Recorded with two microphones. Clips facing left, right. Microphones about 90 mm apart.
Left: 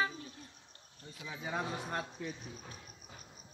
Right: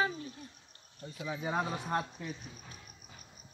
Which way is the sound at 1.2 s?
20° right (ahead or behind).